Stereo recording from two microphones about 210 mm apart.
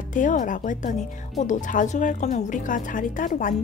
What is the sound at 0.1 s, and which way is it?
A woman's voice, 40° left (ahead or behind).